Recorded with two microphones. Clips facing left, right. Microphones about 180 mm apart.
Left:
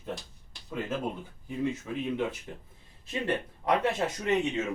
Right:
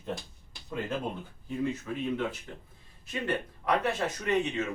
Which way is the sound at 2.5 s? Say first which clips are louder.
Left 2 dB; 20° left (ahead or behind).